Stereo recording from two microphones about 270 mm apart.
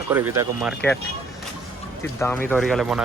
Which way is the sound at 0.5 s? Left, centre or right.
Centre.